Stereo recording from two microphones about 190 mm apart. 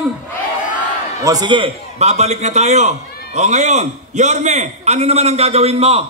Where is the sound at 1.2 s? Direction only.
20° right (ahead or behind).